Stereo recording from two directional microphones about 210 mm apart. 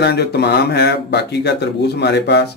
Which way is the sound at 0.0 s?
50° left (ahead or behind).